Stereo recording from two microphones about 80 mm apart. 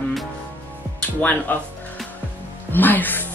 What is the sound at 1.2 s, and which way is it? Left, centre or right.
Speech, centre.